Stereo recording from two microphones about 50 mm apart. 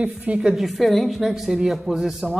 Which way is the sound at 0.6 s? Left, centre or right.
Centre.